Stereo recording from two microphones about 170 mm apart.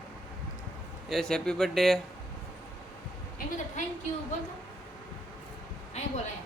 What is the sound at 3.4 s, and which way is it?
Speech, 60° left (ahead or behind).